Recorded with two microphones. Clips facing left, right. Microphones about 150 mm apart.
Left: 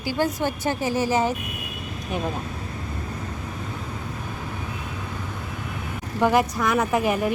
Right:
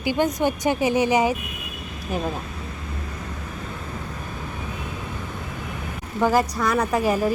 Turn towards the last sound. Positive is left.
turn(degrees=0)  # may be behind; listen again after turning